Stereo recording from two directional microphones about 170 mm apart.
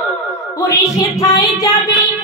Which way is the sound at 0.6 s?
20° left (ahead or behind).